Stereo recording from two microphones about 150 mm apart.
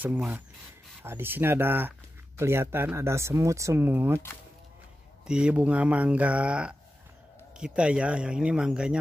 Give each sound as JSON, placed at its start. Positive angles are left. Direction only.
{"t": 0.0, "sound": "speech", "side_deg": -10}
{"t": 5.2, "sound": "speech", "side_deg": -5}